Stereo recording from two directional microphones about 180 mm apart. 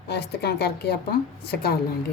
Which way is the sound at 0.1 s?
65° left (ahead or behind).